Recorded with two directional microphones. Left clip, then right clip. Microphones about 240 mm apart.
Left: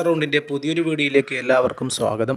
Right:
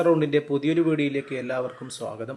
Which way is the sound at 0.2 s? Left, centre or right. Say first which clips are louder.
Left 2 dB; left.